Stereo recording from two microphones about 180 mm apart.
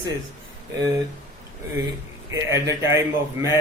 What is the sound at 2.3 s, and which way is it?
A man's voice, 15° right (ahead or behind).